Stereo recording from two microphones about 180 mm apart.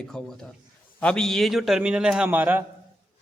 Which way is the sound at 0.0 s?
5° left (ahead or behind).